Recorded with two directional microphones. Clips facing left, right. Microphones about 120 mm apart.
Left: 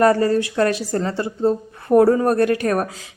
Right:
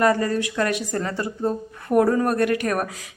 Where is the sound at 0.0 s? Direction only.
35° left (ahead or behind).